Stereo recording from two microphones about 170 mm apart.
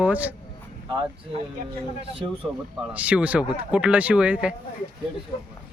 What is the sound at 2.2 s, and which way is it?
Speech, 25° right (ahead or behind).